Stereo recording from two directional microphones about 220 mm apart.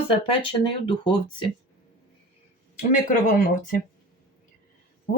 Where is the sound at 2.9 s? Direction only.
35° left (ahead or behind).